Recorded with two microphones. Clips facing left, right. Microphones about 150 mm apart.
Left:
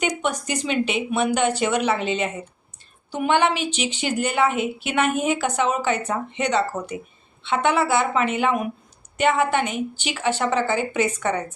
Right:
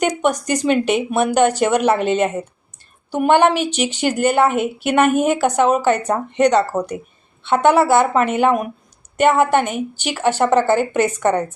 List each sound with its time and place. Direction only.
0.0 s a woman's voice: 45° right (ahead or behind)